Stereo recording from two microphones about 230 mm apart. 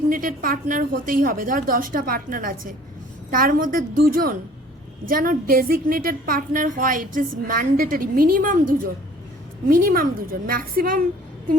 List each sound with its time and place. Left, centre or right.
0.1 s a woman's voice: right